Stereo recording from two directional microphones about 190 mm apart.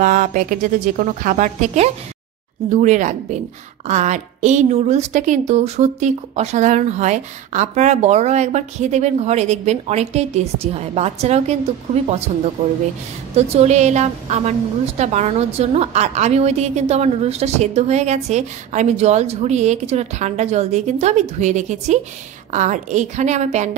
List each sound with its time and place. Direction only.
0.0 s a woman's voice: 40° right (ahead or behind)
13.4 s a woman's voice: 35° right (ahead or behind)